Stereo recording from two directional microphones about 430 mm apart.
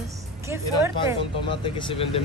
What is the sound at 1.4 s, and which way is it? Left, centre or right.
Speech, centre.